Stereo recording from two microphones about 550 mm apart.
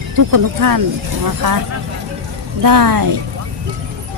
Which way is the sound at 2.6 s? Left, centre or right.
Right.